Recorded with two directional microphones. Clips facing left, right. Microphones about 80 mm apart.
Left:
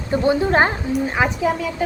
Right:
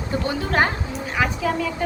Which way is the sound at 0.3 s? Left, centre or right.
Left.